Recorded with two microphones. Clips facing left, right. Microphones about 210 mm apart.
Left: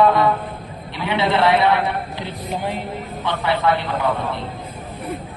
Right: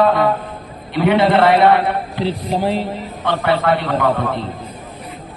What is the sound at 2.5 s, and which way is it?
Speech, 35° right (ahead or behind).